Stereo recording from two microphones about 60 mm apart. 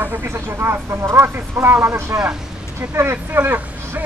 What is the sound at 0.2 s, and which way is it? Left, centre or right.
Speech, right.